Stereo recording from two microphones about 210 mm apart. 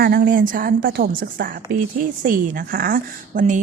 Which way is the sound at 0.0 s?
45° right (ahead or behind).